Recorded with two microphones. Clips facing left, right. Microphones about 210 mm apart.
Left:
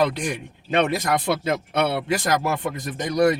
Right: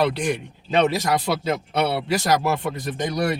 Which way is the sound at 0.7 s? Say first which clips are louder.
Right 1 dB; 50° left (ahead or behind).